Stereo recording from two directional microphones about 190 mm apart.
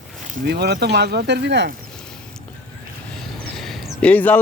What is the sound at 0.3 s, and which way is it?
Speech, 50° right (ahead or behind).